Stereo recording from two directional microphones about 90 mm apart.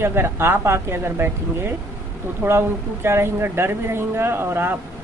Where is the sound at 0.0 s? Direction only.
25° right (ahead or behind).